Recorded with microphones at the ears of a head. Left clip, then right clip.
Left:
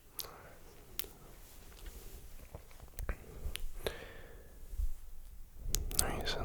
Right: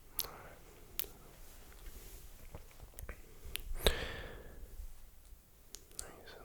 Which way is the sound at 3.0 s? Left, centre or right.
Left.